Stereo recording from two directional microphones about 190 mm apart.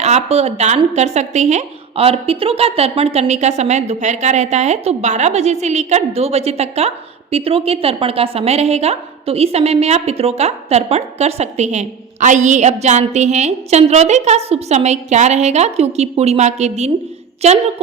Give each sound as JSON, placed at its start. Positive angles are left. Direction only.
{"t": 0.0, "sound": "speech", "side_deg": -35}